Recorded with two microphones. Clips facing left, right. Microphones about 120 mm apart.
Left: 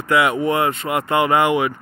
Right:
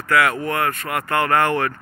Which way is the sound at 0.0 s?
20° left (ahead or behind).